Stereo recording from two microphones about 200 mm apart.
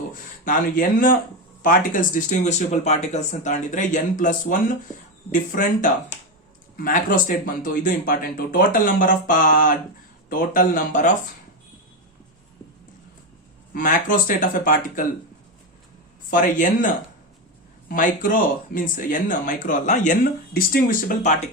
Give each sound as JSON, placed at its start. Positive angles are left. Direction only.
{"t": 0.1, "sound": "speech", "side_deg": 40}
{"t": 13.7, "sound": "speech", "side_deg": 40}
{"t": 16.3, "sound": "speech", "side_deg": 40}